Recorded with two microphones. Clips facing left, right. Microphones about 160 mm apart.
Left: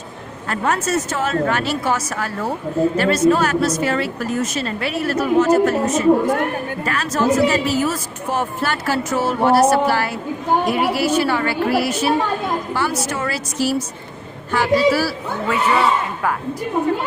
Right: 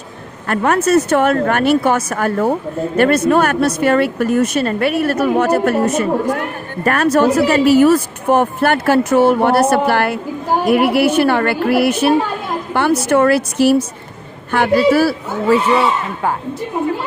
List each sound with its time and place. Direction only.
0.4 s speech: 60° right (ahead or behind)
15.4 s speech: 30° right (ahead or behind)